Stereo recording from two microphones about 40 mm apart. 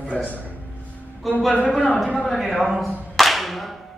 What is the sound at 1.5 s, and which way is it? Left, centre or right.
Speech, left.